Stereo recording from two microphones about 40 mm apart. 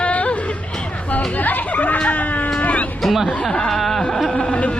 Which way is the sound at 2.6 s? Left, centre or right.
Left.